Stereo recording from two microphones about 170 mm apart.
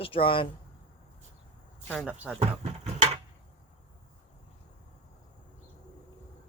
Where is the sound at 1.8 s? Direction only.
5° right (ahead or behind).